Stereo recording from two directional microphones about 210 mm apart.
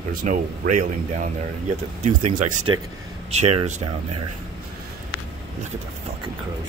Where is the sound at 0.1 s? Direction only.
40° right (ahead or behind).